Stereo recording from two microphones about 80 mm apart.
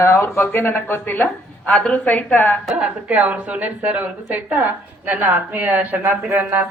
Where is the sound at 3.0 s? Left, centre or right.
Centre.